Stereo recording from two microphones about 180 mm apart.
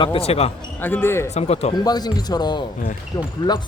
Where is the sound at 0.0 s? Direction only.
30° left (ahead or behind).